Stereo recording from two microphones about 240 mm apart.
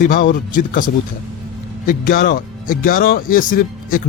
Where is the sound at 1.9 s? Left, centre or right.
Left.